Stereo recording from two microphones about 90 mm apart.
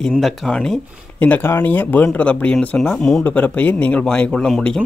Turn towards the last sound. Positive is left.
turn(degrees=5)  # may be behind; listen again after turning